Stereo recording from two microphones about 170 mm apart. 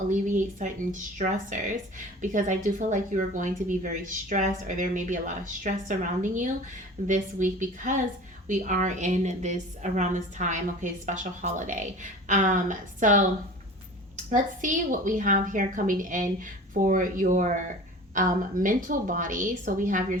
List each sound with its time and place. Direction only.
0.1 s a woman's voice: 45° right (ahead or behind)
14.3 s a woman's voice: 50° right (ahead or behind)